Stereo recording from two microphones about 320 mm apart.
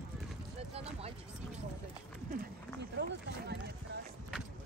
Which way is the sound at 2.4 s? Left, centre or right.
Right.